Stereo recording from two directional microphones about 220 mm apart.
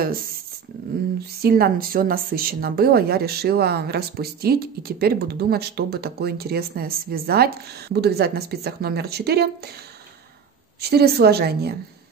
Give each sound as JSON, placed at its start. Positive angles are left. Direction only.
{"t": 1.4, "sound": "a woman's voice", "side_deg": -45}
{"t": 10.8, "sound": "a woman's voice", "side_deg": -45}